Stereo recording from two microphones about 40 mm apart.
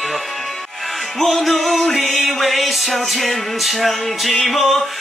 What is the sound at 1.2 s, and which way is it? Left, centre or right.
Music, centre.